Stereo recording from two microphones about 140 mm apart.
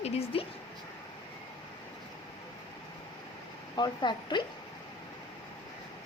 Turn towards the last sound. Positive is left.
turn(degrees=35)  # may be behind; listen again after turning